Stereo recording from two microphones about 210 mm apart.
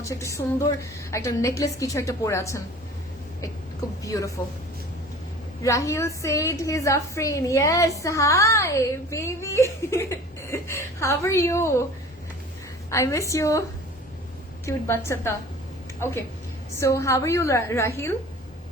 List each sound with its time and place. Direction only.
0.0 s a woman's voice: 15° left (ahead or behind)
5.6 s a woman's voice: 15° left (ahead or behind)
12.9 s a woman's voice: 15° left (ahead or behind)